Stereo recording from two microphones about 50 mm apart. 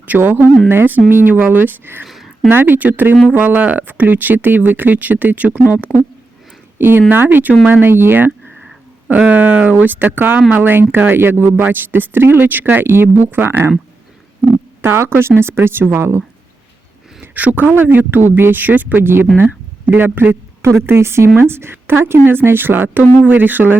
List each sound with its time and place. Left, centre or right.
0.2 s speech: right
2.0 s a sound: centre
2.5 s speech: right
6.7 s speech: right
9.0 s speech: right
14.8 s speech: right
17.3 s speech: right
18.3 s speech: right
18.6 s speech: right
19.4 s a sound: right
20.1 s speech: right
20.8 s speech: right